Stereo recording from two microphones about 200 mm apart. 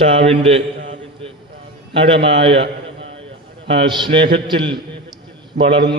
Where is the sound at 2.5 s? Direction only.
60° right (ahead or behind).